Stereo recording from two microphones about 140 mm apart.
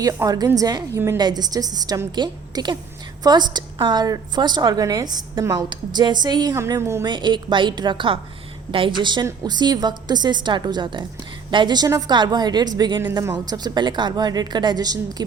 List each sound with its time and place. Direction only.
0.0 s a woman's voice: 25° right (ahead or behind)
7.0 s a woman's voice: 35° right (ahead or behind)